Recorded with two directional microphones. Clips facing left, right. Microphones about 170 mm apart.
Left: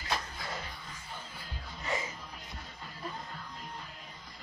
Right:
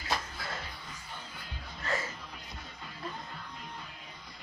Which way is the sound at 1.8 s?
15° left (ahead or behind).